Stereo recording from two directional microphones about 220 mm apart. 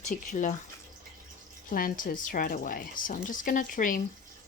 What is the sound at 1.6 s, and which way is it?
Speech, 40° left (ahead or behind).